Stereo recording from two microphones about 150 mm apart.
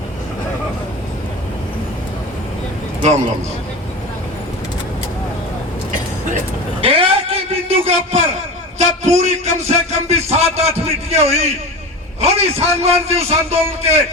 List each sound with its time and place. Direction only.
3.0 s a man's voice: 45° right (ahead or behind)
6.8 s a sound: 40° right (ahead or behind)
8.8 s a man's voice: 50° right (ahead or behind)